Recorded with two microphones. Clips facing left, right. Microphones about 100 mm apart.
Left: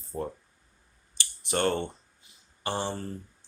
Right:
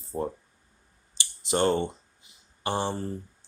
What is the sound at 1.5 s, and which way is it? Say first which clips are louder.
Speech: right 3 dB; 15° right (ahead or behind).